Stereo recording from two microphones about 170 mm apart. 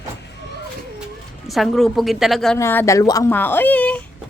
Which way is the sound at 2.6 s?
15° left (ahead or behind).